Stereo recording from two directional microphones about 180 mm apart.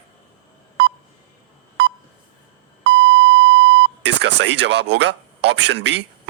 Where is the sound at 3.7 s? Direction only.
75° right (ahead or behind).